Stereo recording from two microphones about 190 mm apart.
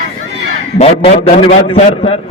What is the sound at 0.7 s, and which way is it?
A man's voice, 35° left (ahead or behind).